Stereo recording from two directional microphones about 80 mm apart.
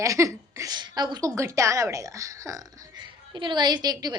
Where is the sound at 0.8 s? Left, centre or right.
Right.